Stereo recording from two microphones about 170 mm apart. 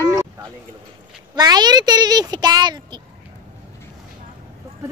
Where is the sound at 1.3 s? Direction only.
25° right (ahead or behind).